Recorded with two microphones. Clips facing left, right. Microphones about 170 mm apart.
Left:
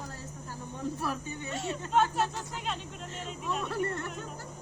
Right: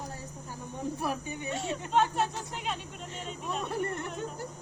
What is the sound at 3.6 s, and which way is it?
Speech, 15° right (ahead or behind).